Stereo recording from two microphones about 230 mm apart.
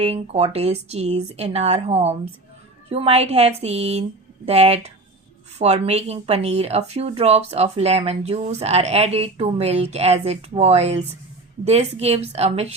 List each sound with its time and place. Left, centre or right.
0.0 s speech: right